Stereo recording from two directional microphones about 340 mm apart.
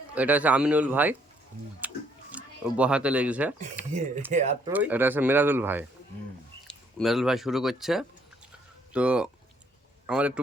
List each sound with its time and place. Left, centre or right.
0.1 s speech: centre
1.8 s music: centre
2.3 s speech: centre
4.3 s speech: centre
4.7 s speech: centre